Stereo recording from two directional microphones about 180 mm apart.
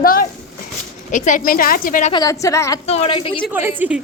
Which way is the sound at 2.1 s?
20° left (ahead or behind).